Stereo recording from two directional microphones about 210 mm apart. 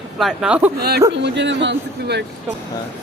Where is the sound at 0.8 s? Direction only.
50° right (ahead or behind).